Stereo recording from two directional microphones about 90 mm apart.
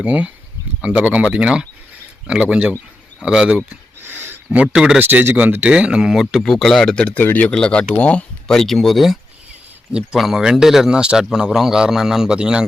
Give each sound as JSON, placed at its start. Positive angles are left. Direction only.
{"t": 0.0, "sound": "speech", "side_deg": -15}
{"t": 4.0, "sound": "a sound", "side_deg": -20}
{"t": 4.5, "sound": "speech", "side_deg": -10}
{"t": 5.0, "sound": "speech", "side_deg": -20}